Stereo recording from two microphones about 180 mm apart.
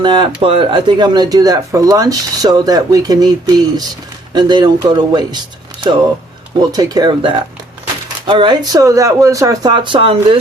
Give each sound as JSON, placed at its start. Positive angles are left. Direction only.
{"t": 0.0, "sound": "speech", "side_deg": -25}
{"t": 6.6, "sound": "speech", "side_deg": -20}